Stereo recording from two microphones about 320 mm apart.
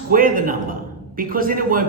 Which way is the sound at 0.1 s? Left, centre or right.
Right.